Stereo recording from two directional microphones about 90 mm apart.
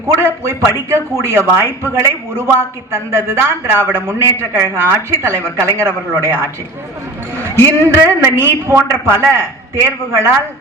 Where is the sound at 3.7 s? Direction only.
25° right (ahead or behind).